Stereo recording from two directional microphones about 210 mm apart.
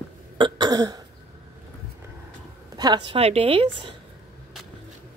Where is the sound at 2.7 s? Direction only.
20° right (ahead or behind).